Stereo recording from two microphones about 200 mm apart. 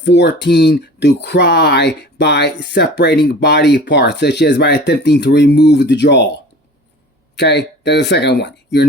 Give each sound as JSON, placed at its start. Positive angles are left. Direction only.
{"t": 0.0, "sound": "speech", "side_deg": 60}